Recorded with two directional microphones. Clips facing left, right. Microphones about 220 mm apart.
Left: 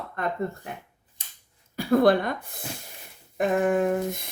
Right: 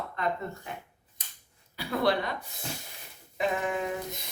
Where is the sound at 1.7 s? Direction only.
50° left (ahead or behind).